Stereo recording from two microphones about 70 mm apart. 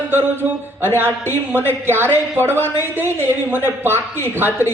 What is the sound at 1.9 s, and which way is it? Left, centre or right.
Speech, right.